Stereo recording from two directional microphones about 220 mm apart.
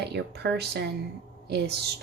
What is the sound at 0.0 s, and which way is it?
Speech, 50° right (ahead or behind).